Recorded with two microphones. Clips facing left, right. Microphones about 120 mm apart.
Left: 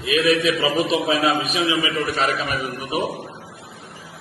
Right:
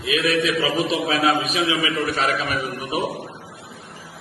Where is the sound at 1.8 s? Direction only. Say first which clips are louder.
Even; 15° left (ahead or behind).